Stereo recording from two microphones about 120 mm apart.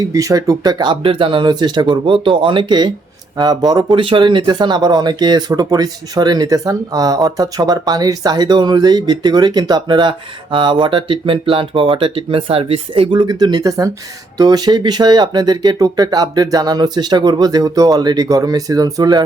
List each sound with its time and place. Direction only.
0.1 s speech: 30° right (ahead or behind)